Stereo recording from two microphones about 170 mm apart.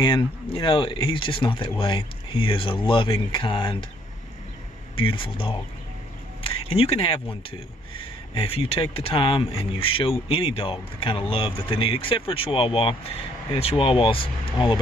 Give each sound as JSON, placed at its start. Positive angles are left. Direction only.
{"t": 0.0, "sound": "speech", "side_deg": 30}
{"t": 4.9, "sound": "speech", "side_deg": 30}